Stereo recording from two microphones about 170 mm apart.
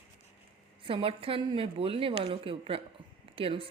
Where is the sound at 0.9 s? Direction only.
35° right (ahead or behind).